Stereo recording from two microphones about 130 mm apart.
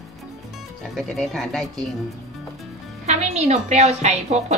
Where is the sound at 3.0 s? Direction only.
60° right (ahead or behind).